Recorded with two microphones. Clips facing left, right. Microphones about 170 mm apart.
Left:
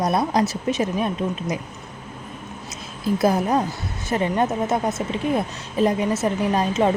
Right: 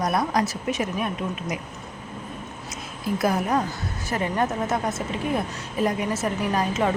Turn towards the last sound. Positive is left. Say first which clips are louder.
# left 4 dB
turn(degrees=25)  # may be behind; listen again after turning